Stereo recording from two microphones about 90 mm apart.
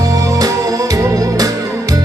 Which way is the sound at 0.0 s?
40° right (ahead or behind).